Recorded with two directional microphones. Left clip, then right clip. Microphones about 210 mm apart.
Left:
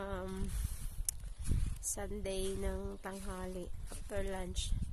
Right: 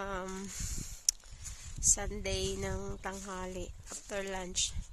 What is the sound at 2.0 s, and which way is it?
A woman's voice, 15° right (ahead or behind).